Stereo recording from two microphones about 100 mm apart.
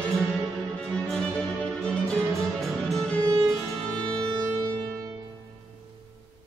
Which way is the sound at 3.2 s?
35° right (ahead or behind).